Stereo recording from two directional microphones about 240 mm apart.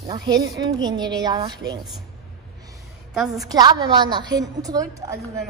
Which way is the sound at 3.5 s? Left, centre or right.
Centre.